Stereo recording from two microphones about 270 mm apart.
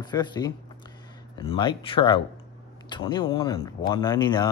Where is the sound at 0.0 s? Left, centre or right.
Centre.